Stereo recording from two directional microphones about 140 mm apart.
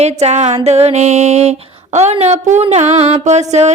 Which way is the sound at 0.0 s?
50° right (ahead or behind).